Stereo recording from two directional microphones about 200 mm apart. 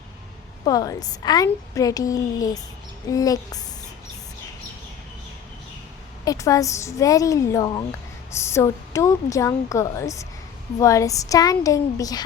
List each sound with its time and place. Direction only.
0.6 s speech: 20° left (ahead or behind)
6.2 s speech: 15° left (ahead or behind)